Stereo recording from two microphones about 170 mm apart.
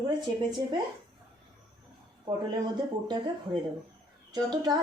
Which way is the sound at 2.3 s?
25° right (ahead or behind).